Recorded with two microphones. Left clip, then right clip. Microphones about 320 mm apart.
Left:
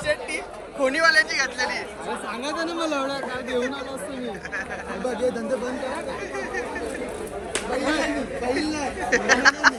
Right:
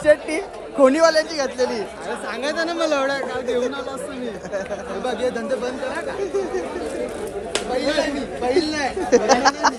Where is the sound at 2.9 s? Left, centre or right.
Centre.